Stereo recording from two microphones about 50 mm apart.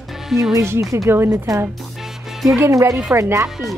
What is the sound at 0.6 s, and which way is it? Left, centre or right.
Speech, right.